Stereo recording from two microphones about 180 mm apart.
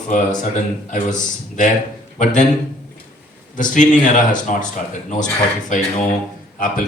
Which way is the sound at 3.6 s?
45° left (ahead or behind).